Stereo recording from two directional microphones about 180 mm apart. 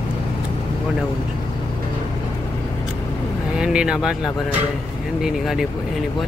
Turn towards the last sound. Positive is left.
turn(degrees=0)  # may be behind; listen again after turning